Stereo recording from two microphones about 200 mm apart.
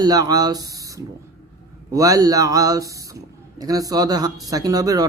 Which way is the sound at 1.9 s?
15° right (ahead or behind).